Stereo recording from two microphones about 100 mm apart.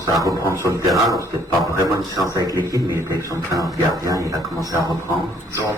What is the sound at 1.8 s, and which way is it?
A man's voice, 35° right (ahead or behind).